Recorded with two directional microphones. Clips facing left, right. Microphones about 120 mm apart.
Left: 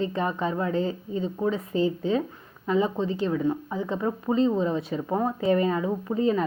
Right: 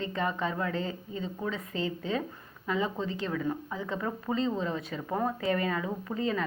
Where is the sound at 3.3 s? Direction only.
20° left (ahead or behind).